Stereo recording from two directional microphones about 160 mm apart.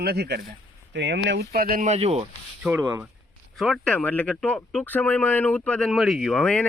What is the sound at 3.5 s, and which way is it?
Speech, centre (ahead or behind).